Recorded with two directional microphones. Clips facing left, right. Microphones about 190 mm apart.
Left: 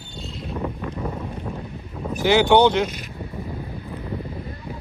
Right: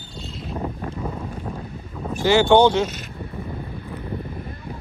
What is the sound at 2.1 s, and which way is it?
Speech, 15° left (ahead or behind).